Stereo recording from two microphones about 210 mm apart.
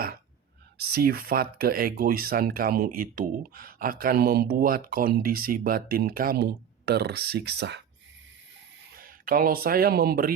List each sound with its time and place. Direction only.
0.8 s speech: 50° right (ahead or behind)
9.0 s speech: 40° right (ahead or behind)